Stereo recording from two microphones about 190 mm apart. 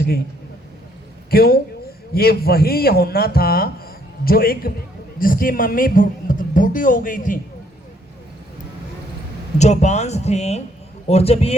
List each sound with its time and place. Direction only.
1.3 s speech: 55° left (ahead or behind)
9.6 s speech: 35° left (ahead or behind)